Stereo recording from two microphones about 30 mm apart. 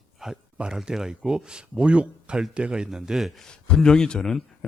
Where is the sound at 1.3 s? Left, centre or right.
Right.